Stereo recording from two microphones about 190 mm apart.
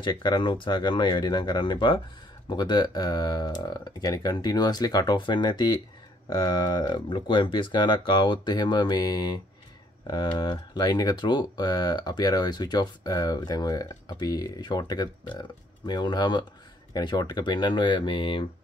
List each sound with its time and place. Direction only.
0.0 s speech: 25° left (ahead or behind)